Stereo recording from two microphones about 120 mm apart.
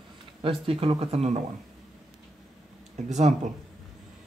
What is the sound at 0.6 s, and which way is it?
Speech, 50° right (ahead or behind).